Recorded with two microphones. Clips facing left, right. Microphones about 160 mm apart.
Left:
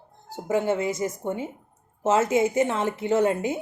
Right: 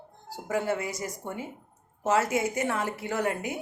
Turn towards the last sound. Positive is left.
turn(degrees=25)  # may be behind; listen again after turning